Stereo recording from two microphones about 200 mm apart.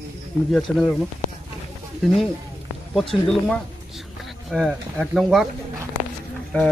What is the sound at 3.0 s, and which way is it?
Speech, centre (ahead or behind).